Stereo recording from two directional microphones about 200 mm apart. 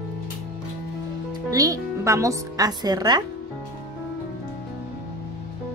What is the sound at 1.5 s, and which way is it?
A woman's voice, 15° right (ahead or behind).